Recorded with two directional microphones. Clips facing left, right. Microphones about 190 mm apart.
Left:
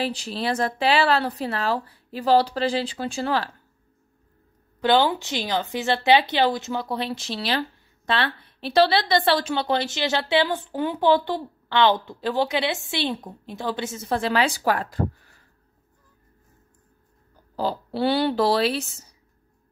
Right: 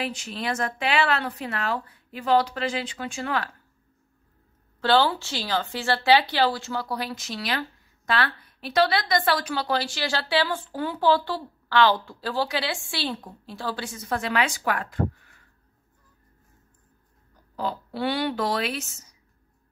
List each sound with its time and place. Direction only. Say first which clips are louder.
0.0 s speech: left 4 dB; 35° left (ahead or behind)
4.7 s speech: left 2 dB; 15° left (ahead or behind); by 15.4 s 35° left (ahead or behind)
17.6 s speech: left 4 dB; 30° left (ahead or behind)